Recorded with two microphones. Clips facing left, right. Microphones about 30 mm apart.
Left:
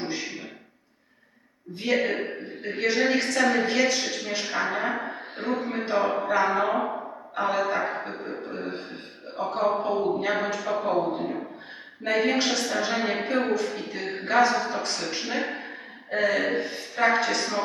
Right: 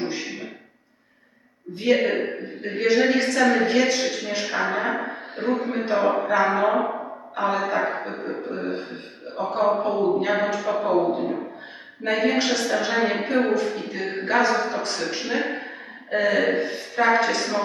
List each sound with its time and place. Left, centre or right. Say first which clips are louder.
1.7 s speech: right 5 dB; centre
2.0 s speech: right 4 dB; right
2.7 s a woman's voice: right 4 dB; centre
6.0 s speech: right 4 dB; right
6.4 s a sound: right 3 dB; centre
7.5 s a woman's voice: even; centre
7.8 s a woman's voice: right 4 dB; right; by 17.2 s centre
17.2 s a woman's voice: right 3 dB; centre